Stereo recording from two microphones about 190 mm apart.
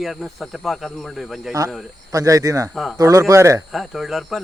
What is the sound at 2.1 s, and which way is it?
Speech, 15° right (ahead or behind).